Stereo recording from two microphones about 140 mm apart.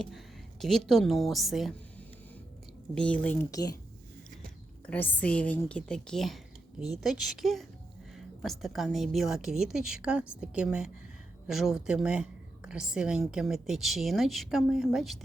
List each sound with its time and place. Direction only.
0.6 s a woman's voice: centre (ahead or behind)
2.9 s speech: 10° left (ahead or behind)
3.5 s speech: 25° left (ahead or behind)
4.9 s a woman's voice: 10° left (ahead or behind)